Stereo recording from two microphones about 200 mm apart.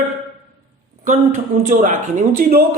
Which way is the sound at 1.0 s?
40° right (ahead or behind).